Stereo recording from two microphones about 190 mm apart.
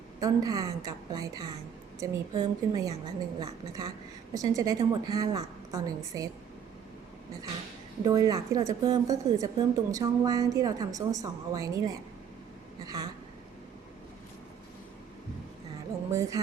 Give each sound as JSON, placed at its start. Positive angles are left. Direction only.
{"t": 0.2, "sound": "a woman's voice", "side_deg": -20}
{"t": 8.0, "sound": "a woman's voice", "side_deg": -20}
{"t": 16.0, "sound": "music", "side_deg": -15}